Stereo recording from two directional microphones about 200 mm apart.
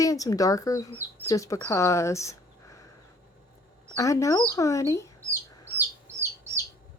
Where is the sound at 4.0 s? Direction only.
15° left (ahead or behind).